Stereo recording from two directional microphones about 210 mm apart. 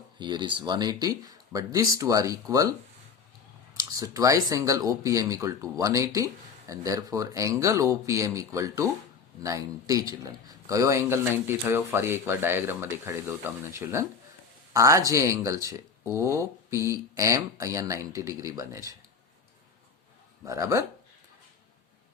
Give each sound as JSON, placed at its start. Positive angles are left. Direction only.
{"t": 0.2, "sound": "speech", "side_deg": -20}
{"t": 3.8, "sound": "speech", "side_deg": -15}
{"t": 20.4, "sound": "speech", "side_deg": -15}